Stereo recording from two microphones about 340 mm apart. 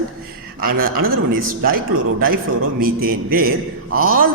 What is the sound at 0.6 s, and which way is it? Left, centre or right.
Speech, right.